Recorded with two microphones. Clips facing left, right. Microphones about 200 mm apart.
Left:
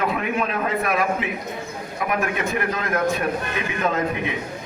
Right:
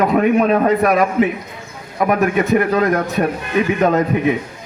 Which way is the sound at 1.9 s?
45° right (ahead or behind).